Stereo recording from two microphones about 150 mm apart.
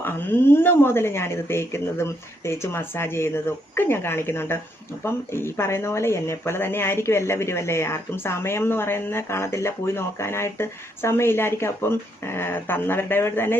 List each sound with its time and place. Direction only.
0.0 s speech: 15° left (ahead or behind)